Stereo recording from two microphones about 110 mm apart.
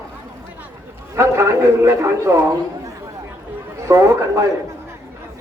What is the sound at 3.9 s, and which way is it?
Speech, 25° right (ahead or behind).